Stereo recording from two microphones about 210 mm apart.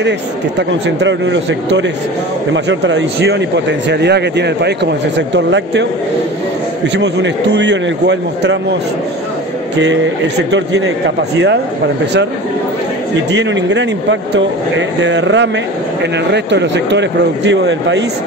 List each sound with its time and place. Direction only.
0.6 s speech: 60° right (ahead or behind)
7.0 s speech: 55° right (ahead or behind)
10.5 s speech: 55° right (ahead or behind)
13.1 s speech: 60° right (ahead or behind)